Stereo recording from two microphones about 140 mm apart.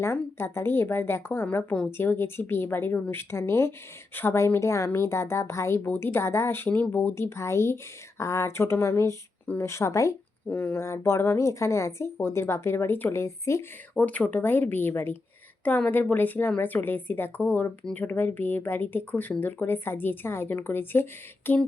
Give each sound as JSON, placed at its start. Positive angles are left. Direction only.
{"t": 0.0, "sound": "speech", "side_deg": 15}